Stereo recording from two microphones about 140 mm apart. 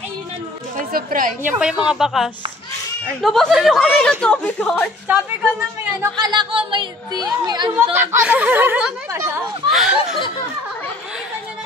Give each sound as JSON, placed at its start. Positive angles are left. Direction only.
{"t": 0.7, "sound": "a woman's voice", "side_deg": -80}
{"t": 1.4, "sound": "speech", "side_deg": -5}
{"t": 5.0, "sound": "speech", "side_deg": -15}
{"t": 6.2, "sound": "a woman's voice", "side_deg": -35}
{"t": 7.7, "sound": "speech", "side_deg": -15}